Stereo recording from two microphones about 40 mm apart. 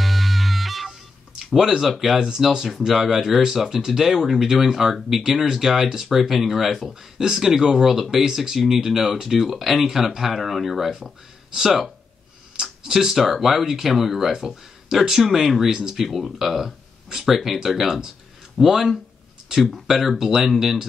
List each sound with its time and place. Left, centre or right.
0.0 s music: centre
1.4 s speech: centre
2.1 s speech: centre
6.9 s speech: centre
12.8 s speech: centre